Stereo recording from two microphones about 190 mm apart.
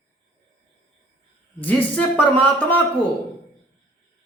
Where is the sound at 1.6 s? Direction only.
10° left (ahead or behind).